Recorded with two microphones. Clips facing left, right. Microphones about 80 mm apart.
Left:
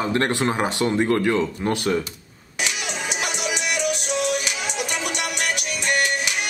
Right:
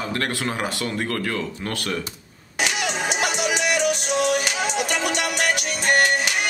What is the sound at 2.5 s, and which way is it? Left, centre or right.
Music, right.